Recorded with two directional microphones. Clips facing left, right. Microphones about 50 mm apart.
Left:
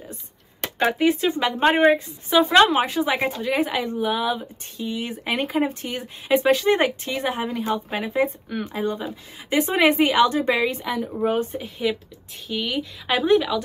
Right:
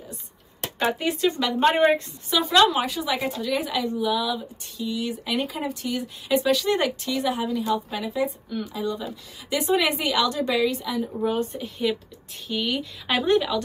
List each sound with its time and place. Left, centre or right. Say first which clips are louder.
0.7 s speech: left 5 dB; left
2.2 s speech: left 3 dB; left
11.6 s speech: left 1 dB; centre